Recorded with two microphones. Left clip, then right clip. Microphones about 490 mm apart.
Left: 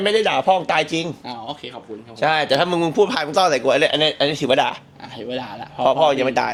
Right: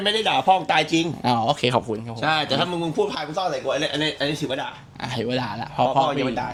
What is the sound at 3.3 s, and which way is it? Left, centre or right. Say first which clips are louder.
Speech: left 8 dB; left.